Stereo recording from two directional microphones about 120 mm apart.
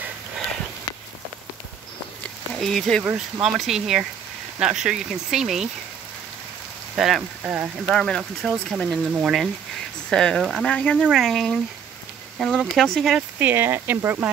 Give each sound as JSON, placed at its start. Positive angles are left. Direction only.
{"t": 2.5, "sound": "speech", "side_deg": 0}
{"t": 3.0, "sound": "speech", "side_deg": -10}
{"t": 7.0, "sound": "speech", "side_deg": 0}
{"t": 9.1, "sound": "speech", "side_deg": -5}
{"t": 10.0, "sound": "speech", "side_deg": 5}
{"t": 13.4, "sound": "speech", "side_deg": -15}